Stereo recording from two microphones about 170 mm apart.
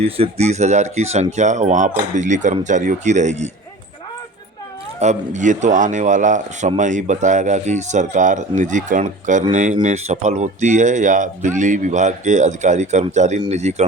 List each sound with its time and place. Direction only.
0.0 s speech: 35° right (ahead or behind)
4.9 s speech: 45° right (ahead or behind)